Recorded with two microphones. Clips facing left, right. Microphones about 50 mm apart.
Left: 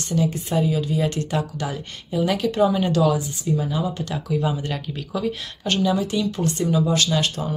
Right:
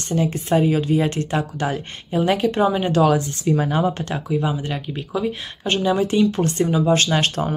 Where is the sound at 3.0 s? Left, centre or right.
Right.